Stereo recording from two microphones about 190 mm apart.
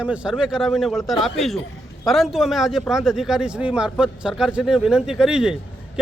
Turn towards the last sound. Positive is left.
turn(degrees=-5)  # may be behind; listen again after turning